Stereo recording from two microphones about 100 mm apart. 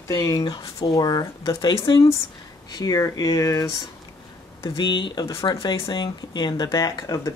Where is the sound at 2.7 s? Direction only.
35° left (ahead or behind).